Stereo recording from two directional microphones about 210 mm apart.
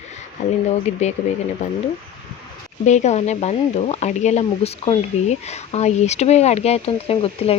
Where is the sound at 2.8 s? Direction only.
35° left (ahead or behind).